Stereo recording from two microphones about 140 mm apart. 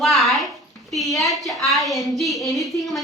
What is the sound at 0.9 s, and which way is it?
A woman's voice, centre (ahead or behind).